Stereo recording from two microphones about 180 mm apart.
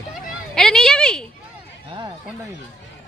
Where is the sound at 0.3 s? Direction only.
Centre (ahead or behind).